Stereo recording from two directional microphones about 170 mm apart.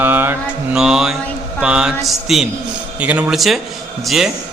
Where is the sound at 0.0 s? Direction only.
10° right (ahead or behind).